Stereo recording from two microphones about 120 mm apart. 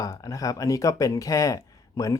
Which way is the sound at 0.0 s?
30° left (ahead or behind).